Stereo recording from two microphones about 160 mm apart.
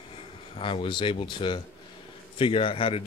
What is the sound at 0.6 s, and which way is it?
Speech, 30° left (ahead or behind).